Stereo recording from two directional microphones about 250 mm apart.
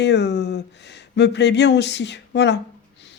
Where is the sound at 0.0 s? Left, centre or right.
Left.